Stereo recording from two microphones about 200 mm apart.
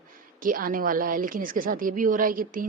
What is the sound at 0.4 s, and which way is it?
Speech, 45° right (ahead or behind).